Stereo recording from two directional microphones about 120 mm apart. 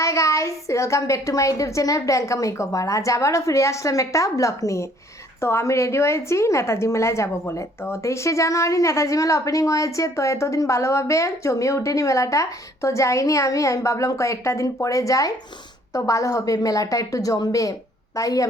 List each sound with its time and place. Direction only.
0.0 s a woman's voice: 25° left (ahead or behind)